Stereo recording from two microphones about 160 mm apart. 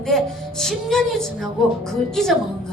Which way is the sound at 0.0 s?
5° left (ahead or behind).